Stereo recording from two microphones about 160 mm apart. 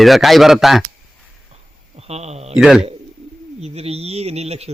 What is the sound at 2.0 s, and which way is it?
Speech, 40° right (ahead or behind).